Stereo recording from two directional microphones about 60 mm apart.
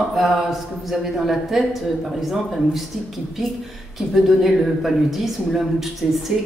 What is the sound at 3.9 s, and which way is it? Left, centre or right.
A woman's voice, centre.